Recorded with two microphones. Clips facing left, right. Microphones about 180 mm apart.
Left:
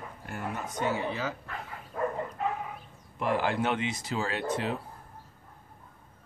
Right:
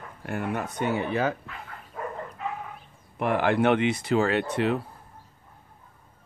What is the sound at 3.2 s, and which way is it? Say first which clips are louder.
Speech: right 5 dB; 60° right (ahead or behind).